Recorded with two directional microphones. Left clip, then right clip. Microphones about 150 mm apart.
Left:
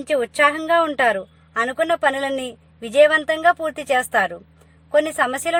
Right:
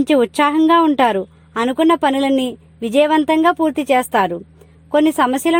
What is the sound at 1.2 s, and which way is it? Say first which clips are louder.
Speech: right 3 dB; 35° right (ahead or behind).